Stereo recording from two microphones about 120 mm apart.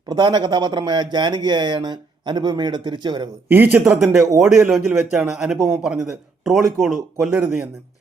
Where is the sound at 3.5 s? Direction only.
15° right (ahead or behind).